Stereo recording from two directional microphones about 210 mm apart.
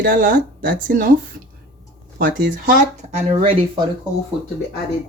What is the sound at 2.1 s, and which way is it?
Speech, 40° right (ahead or behind).